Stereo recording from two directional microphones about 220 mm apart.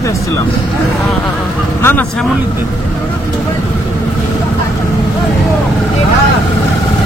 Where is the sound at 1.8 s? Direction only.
10° left (ahead or behind).